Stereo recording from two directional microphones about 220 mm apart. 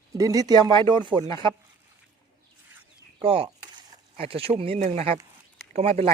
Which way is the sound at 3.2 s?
25° right (ahead or behind).